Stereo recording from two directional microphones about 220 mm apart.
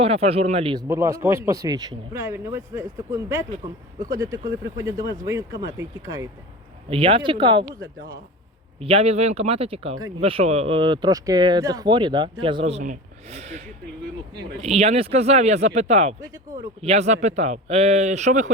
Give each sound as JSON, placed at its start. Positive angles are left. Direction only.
{"t": 0.0, "sound": "speech", "side_deg": -25}
{"t": 0.9, "sound": "speech", "side_deg": -15}
{"t": 4.8, "sound": "speech", "side_deg": -15}
{"t": 14.6, "sound": "speech", "side_deg": -30}